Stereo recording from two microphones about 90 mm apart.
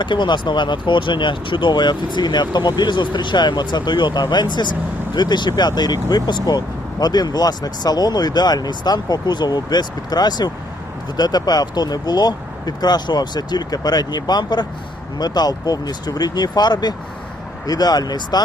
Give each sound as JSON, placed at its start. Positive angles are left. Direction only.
{"t": 0.0, "sound": "speech", "side_deg": 60}